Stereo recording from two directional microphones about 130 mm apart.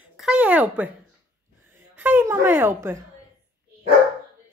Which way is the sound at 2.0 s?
15° right (ahead or behind).